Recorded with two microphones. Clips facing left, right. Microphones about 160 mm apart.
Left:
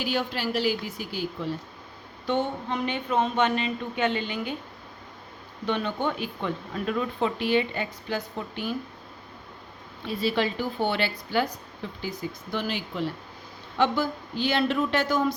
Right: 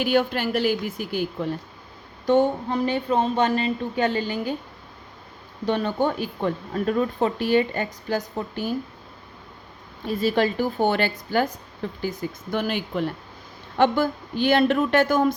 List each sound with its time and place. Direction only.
0.0 s speech: 55° right (ahead or behind)
2.2 s speech: 45° right (ahead or behind)
5.6 s speech: 40° right (ahead or behind)
10.1 s speech: 45° right (ahead or behind)